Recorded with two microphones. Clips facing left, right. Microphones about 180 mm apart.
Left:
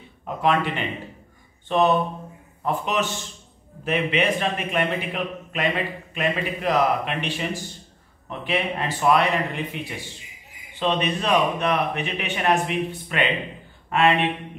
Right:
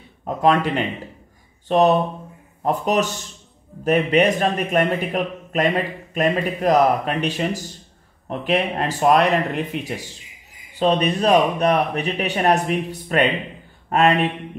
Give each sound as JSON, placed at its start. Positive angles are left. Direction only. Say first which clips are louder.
{"t": 0.2, "sound": "a man's voice", "louder": "right 4 dB", "side_deg": -40}